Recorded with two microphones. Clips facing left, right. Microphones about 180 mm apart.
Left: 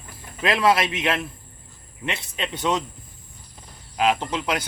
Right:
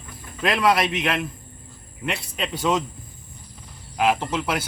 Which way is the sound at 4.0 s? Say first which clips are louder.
Right 1 dB; 10° right (ahead or behind).